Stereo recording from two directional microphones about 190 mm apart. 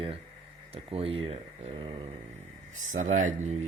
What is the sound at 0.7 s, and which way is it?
Speech, 30° right (ahead or behind).